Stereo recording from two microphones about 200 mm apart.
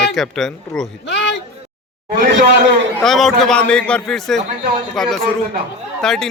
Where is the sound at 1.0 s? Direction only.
60° left (ahead or behind).